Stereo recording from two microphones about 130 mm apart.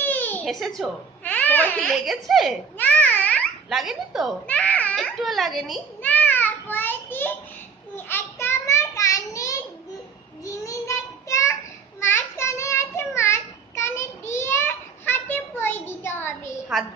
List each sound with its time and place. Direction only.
0.0 s a sound: 15° left (ahead or behind)
0.5 s speech: centre (ahead or behind)
1.2 s babbling: 10° left (ahead or behind)
1.9 s speech: centre (ahead or behind)
2.8 s babbling: 10° left (ahead or behind)
3.6 s speech: centre (ahead or behind)
4.5 s a child's voice: 10° left (ahead or behind)
6.0 s a sound: 15° left (ahead or behind)
7.9 s child singing: 15° left (ahead or behind)
14.3 s a sound: 20° left (ahead or behind)